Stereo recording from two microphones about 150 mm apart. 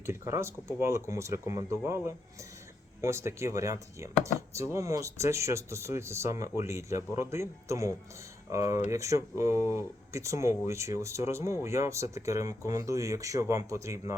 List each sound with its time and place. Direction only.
0.0 s speech: 15° right (ahead or behind)